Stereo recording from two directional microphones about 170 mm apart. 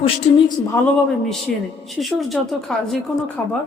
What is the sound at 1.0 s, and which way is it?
A man's voice, centre (ahead or behind).